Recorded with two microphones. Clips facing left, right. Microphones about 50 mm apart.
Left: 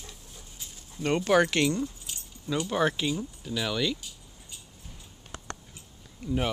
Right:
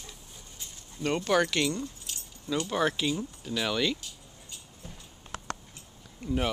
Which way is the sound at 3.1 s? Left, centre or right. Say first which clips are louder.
Even; centre.